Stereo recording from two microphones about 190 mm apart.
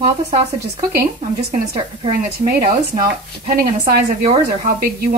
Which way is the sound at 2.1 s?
50° right (ahead or behind).